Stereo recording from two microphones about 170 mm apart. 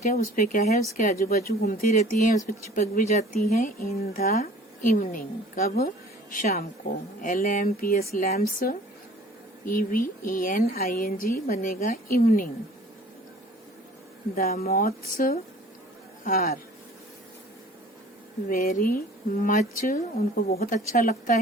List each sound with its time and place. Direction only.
0.0 s speech: 50° left (ahead or behind)
2.0 s speech: 50° left (ahead or behind)
4.4 s a woman's voice: 50° left (ahead or behind)
14.3 s speech: 60° left (ahead or behind)
18.4 s speech: 55° left (ahead or behind)
20.5 s speech: 60° left (ahead or behind)